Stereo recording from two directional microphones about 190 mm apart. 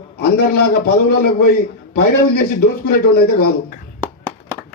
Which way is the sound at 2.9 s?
55° left (ahead or behind).